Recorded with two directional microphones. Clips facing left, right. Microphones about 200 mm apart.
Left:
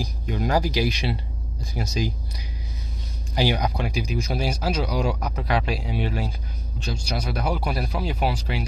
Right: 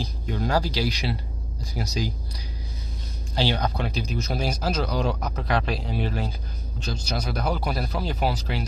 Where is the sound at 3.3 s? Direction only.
15° left (ahead or behind).